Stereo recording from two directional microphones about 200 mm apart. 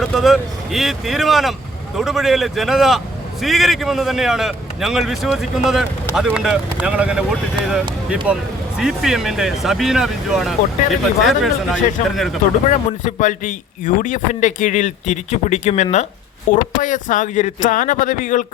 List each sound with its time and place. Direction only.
0.0 s a man's voice: centre (ahead or behind)
13.0 s a man's voice: 40° left (ahead or behind)